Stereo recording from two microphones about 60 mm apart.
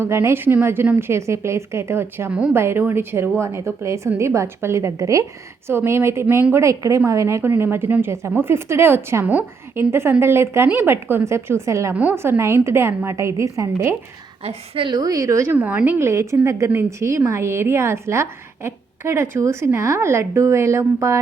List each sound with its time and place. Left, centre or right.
0.0 s a woman's voice: right
5.6 s a woman's voice: right
7.4 s a woman's voice: right
12.1 s a woman's voice: right
14.9 s speech: right
15.4 s a woman's voice: right
16.0 s a woman's voice: right